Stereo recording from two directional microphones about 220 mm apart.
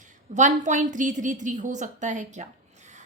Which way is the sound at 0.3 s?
35° right (ahead or behind).